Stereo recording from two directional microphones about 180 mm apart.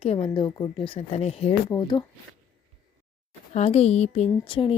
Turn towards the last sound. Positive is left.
turn(degrees=30)  # may be behind; listen again after turning